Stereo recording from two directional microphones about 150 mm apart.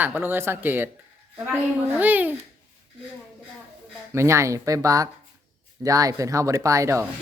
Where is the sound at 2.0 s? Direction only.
10° right (ahead or behind).